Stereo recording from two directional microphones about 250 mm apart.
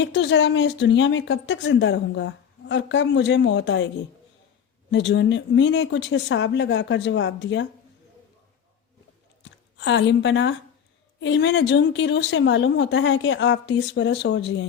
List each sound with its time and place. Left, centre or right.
0.0 s speech: left
4.9 s speech: left
9.4 s speech: left